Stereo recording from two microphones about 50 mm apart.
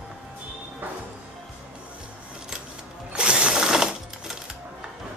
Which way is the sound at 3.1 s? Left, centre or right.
Right.